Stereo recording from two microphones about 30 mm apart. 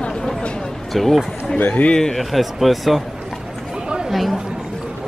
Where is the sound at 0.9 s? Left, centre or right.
Centre.